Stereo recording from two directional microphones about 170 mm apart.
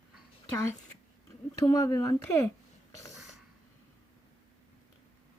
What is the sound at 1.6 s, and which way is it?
Speech, 20° left (ahead or behind).